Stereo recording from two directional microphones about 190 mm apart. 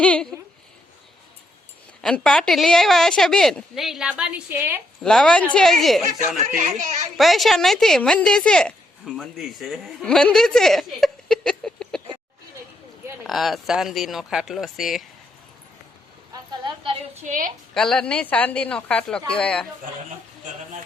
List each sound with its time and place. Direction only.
0.0 s speech: 5° left (ahead or behind)
2.0 s a woman's voice: 5° left (ahead or behind)
5.0 s a woman's voice: 5° left (ahead or behind)
6.4 s speech: 40° right (ahead or behind)
7.2 s speech: centre (ahead or behind)
13.2 s a woman's voice: centre (ahead or behind)
16.5 s a woman's voice: 25° right (ahead or behind)
17.2 s a woman's voice: 45° right (ahead or behind)
17.7 s a woman's voice: 5° left (ahead or behind)
20.4 s speech: 40° right (ahead or behind)